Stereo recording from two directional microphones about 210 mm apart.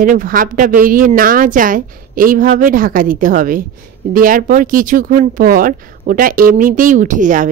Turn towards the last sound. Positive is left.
turn(degrees=-40)  # may be behind; listen again after turning